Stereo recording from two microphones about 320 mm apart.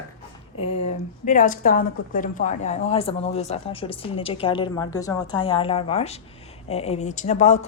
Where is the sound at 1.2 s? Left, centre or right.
Left.